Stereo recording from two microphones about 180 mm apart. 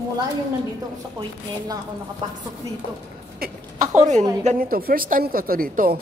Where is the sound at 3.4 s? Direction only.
45° right (ahead or behind).